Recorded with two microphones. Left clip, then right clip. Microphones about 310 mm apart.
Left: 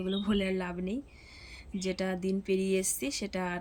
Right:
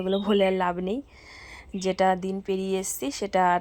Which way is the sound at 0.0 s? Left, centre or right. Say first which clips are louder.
Right 10 dB; right.